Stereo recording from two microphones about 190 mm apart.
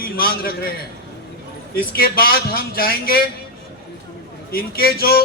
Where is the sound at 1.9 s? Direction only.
50° left (ahead or behind).